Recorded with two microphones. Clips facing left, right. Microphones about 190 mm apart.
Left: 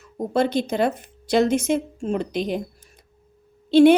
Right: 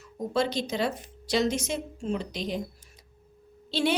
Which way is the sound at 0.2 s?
55° left (ahead or behind).